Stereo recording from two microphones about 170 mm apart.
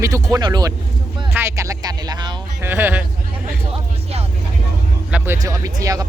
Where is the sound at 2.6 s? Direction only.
10° right (ahead or behind).